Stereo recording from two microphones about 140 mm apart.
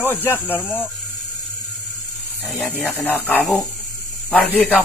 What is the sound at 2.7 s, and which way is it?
Speech, 10° left (ahead or behind).